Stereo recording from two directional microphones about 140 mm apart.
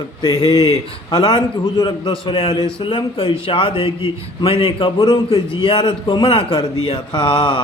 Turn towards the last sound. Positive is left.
turn(degrees=30)  # may be behind; listen again after turning